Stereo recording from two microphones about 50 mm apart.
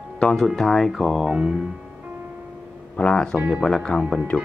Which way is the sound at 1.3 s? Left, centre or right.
Centre.